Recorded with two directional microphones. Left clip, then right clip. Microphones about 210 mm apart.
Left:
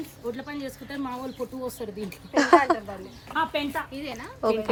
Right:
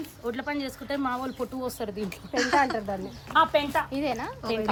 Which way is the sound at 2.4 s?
20° left (ahead or behind).